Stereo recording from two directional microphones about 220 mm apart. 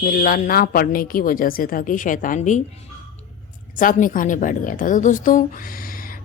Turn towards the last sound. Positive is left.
turn(degrees=35)  # may be behind; listen again after turning